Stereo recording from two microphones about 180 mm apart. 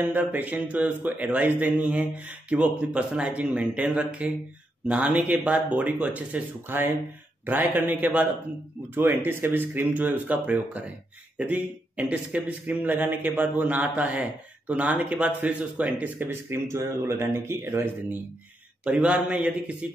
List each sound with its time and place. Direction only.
0.0 s a man's voice: 10° right (ahead or behind)